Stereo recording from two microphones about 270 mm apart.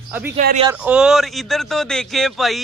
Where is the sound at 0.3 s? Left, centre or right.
Right.